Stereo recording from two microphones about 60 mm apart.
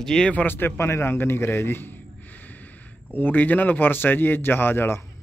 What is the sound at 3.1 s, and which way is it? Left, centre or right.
Speech, left.